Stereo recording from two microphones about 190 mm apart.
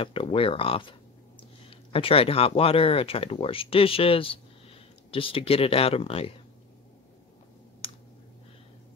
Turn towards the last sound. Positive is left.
turn(degrees=30)  # may be behind; listen again after turning